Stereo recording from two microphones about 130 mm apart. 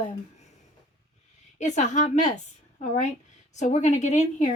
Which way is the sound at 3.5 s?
65° left (ahead or behind).